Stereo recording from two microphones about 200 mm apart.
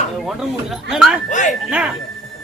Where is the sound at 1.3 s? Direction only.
40° left (ahead or behind).